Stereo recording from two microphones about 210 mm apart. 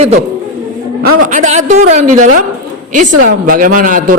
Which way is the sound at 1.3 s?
35° right (ahead or behind).